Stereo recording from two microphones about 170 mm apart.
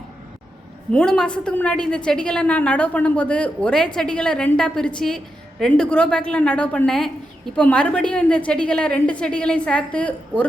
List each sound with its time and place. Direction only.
0.9 s a woman's voice: 5° left (ahead or behind)